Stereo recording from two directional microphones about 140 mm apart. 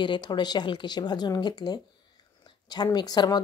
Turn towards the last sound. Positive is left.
turn(degrees=30)  # may be behind; listen again after turning